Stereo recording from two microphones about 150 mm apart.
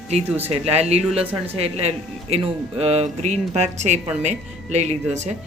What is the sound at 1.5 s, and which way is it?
A woman's voice, 45° right (ahead or behind).